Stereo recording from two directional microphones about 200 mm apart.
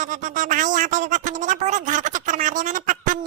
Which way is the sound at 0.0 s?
40° right (ahead or behind).